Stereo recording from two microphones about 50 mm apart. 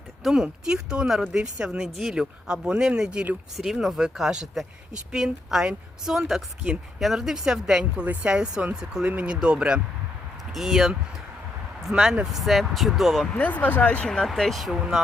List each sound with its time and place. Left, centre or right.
0.2 s speech: centre
1.4 s speech: right
1.8 s speech: centre
2.1 s speech: centre
3.6 s speech: centre
8.0 s a woman's voice: right
8.3 s speech: centre
10.5 s speech: centre
13.3 s speech: left
14.3 s speech: centre